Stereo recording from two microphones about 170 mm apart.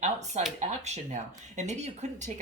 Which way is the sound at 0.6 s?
45° right (ahead or behind).